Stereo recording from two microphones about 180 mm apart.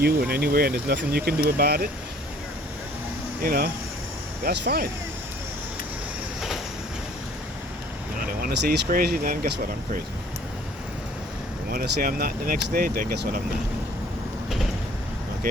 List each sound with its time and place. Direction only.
0.0 s speech: 60° right (ahead or behind)
3.4 s speech: 55° right (ahead or behind)
8.4 s speech: 55° right (ahead or behind)
11.7 s speech: 55° right (ahead or behind)